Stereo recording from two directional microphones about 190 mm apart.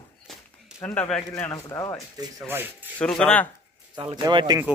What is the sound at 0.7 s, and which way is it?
Speech, 15° left (ahead or behind).